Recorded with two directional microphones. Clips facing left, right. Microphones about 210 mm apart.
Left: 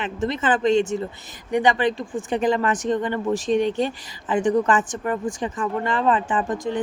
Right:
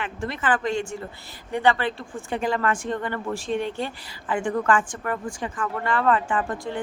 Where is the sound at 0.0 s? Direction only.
20° left (ahead or behind).